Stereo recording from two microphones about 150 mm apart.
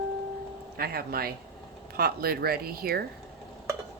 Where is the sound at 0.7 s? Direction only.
90° right.